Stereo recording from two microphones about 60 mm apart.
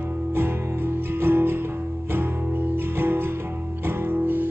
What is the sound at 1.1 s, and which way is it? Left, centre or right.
Music, right.